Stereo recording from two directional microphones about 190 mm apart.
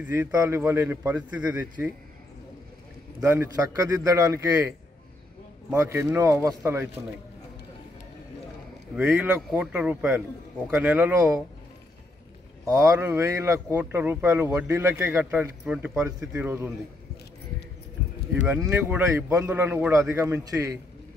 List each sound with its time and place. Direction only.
0.0 s a man's voice: 10° right (ahead or behind)
3.2 s a man's voice: 10° right (ahead or behind)
8.9 s a man's voice: 5° right (ahead or behind)
12.6 s a man's voice: 15° right (ahead or behind)
18.7 s a man's voice: 10° right (ahead or behind)